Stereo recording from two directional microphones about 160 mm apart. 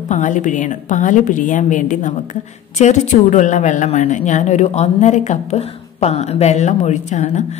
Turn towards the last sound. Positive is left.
turn(degrees=45)  # may be behind; listen again after turning